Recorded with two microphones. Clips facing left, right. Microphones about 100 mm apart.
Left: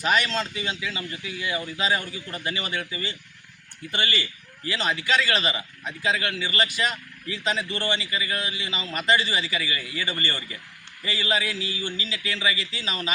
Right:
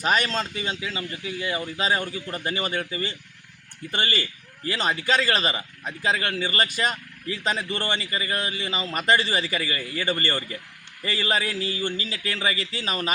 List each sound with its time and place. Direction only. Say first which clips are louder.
0.0 s a man's voice: even; 40° right (ahead or behind)